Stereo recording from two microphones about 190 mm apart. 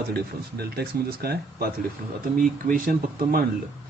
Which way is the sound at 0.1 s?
55° right (ahead or behind).